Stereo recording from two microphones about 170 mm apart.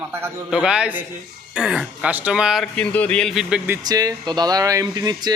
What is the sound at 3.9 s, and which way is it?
Speech, 20° right (ahead or behind).